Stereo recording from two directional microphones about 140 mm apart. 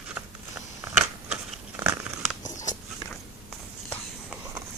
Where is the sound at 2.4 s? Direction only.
60° left (ahead or behind).